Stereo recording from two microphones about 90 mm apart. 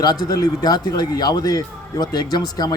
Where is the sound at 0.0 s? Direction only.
45° left (ahead or behind).